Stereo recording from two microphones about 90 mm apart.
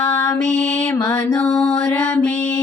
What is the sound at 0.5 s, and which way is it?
Mantra, 15° left (ahead or behind).